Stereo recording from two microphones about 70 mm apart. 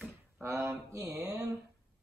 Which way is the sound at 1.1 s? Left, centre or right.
Right.